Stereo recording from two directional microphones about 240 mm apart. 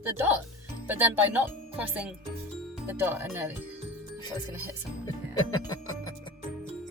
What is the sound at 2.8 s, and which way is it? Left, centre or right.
Speech, centre.